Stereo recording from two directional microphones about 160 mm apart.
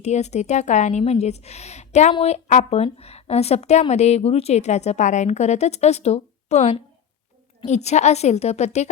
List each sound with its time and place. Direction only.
0.0 s a woman's voice: 45° left (ahead or behind)